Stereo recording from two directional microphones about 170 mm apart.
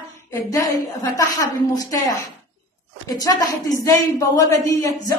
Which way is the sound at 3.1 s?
20° left (ahead or behind).